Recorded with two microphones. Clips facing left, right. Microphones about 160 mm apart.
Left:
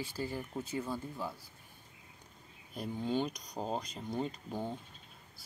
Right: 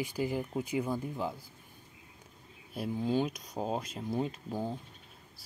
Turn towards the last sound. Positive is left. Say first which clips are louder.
# right 3 dB
turn(degrees=-5)  # may be behind; listen again after turning